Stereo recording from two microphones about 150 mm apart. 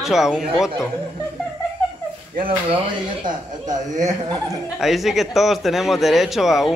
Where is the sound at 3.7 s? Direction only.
55° right (ahead or behind).